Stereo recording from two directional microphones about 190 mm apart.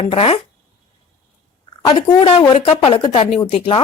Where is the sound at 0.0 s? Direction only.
30° left (ahead or behind).